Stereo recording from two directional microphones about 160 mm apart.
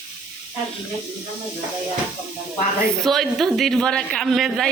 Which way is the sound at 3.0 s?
Centre (ahead or behind).